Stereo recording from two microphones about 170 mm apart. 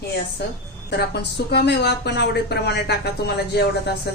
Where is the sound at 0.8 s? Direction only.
75° left (ahead or behind).